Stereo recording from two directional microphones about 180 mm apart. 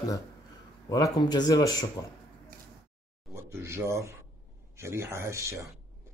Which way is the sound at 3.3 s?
15° right (ahead or behind).